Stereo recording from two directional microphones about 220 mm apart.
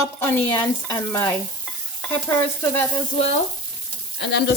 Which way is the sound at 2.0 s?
10° left (ahead or behind).